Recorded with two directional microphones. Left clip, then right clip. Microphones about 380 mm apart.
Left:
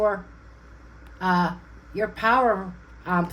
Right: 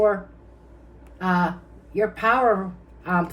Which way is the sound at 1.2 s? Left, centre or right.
Left.